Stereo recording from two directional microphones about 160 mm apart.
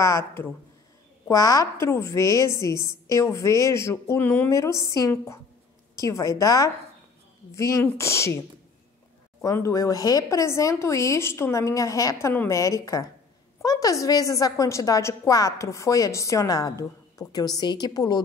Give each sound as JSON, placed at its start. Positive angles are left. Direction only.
{"t": 1.3, "sound": "a woman's voice", "side_deg": 20}
{"t": 9.4, "sound": "a woman's voice", "side_deg": 20}